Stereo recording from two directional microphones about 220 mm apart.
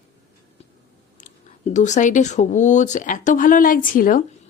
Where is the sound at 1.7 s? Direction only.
35° left (ahead or behind).